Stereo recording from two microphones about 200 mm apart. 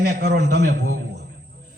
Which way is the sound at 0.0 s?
55° right (ahead or behind).